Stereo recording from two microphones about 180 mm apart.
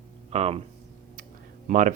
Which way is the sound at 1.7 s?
45° right (ahead or behind).